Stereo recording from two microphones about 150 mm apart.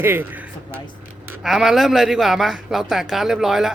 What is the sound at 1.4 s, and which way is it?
Speech, centre (ahead or behind).